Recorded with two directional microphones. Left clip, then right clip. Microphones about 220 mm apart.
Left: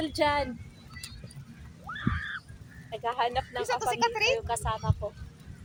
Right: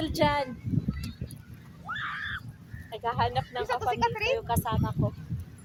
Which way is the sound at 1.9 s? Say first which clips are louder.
Right 2 dB; 55° right (ahead or behind).